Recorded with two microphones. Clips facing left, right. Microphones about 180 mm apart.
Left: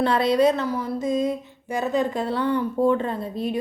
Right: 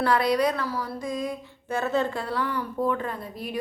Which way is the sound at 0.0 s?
25° left (ahead or behind).